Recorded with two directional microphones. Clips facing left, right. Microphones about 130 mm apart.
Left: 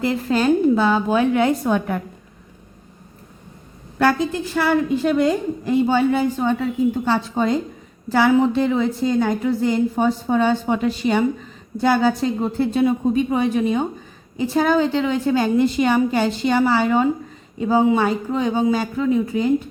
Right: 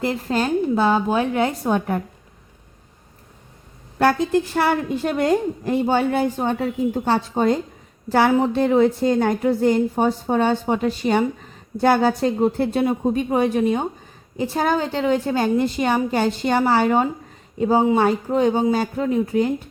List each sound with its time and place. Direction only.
0.0 s a woman's voice: 45° right (ahead or behind)
3.9 s a woman's voice: 50° right (ahead or behind)